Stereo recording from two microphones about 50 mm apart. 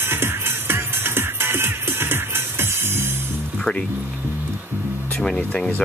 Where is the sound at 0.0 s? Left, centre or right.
Right.